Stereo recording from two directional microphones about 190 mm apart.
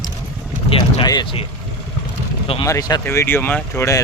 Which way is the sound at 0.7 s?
30° left (ahead or behind).